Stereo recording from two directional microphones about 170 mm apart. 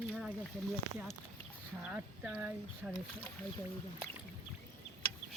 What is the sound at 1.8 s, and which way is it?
Speech, 5° right (ahead or behind).